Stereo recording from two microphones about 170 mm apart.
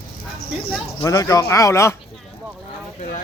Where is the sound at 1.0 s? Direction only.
20° left (ahead or behind).